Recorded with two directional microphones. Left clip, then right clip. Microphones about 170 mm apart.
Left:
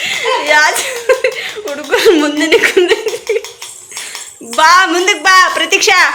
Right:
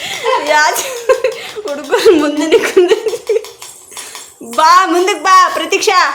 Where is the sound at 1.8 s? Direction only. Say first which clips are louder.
Even; centre (ahead or behind).